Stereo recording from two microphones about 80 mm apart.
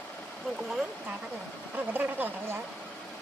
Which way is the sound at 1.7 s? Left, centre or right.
Right.